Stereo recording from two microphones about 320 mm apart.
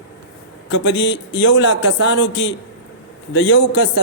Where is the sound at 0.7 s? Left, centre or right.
Left.